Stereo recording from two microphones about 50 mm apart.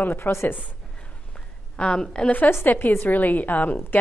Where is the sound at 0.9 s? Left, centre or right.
Centre.